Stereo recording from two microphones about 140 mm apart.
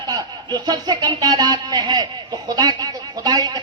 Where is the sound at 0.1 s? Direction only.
30° right (ahead or behind).